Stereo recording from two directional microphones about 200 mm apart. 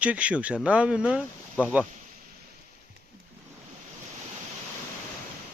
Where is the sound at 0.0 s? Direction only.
5° right (ahead or behind).